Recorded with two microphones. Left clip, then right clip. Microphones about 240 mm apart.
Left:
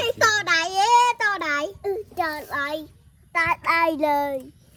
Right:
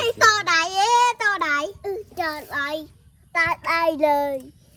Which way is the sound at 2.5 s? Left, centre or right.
Left.